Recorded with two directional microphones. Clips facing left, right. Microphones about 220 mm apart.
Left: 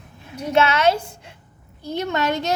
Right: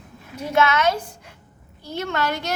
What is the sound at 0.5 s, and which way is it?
A woman's voice, 30° left (ahead or behind).